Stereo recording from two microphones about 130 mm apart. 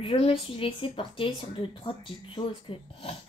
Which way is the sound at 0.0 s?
45° left (ahead or behind).